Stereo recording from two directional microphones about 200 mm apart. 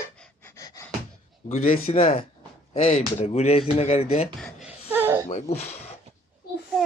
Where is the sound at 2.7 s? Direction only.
40° left (ahead or behind).